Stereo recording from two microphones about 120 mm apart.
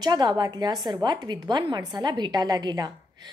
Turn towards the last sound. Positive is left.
turn(degrees=-35)  # may be behind; listen again after turning